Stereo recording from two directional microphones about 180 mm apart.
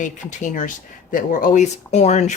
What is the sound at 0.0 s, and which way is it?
Speech, 45° left (ahead or behind).